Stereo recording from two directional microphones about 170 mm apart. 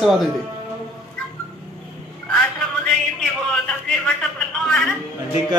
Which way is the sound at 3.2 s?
5° left (ahead or behind).